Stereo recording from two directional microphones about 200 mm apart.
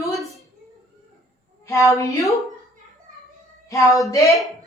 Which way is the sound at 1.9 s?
15° left (ahead or behind).